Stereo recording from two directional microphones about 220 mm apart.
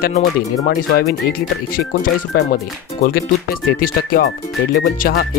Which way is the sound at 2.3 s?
45° left (ahead or behind).